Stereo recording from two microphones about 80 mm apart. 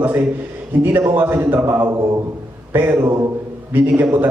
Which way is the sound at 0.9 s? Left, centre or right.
Right.